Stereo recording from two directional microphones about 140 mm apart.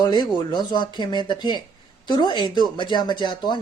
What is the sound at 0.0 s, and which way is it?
Speech, 30° left (ahead or behind).